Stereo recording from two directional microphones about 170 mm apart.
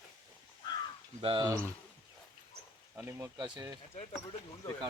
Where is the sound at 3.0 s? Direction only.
15° right (ahead or behind).